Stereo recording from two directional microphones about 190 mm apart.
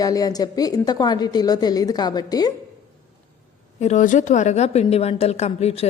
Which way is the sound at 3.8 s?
40° left (ahead or behind).